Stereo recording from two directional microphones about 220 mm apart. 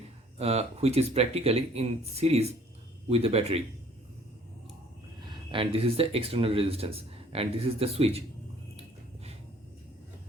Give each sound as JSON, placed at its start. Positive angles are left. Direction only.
{"t": 0.3, "sound": "speech", "side_deg": -30}
{"t": 5.5, "sound": "speech", "side_deg": -25}